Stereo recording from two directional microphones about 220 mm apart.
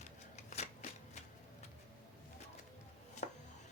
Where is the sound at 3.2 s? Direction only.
35° left (ahead or behind).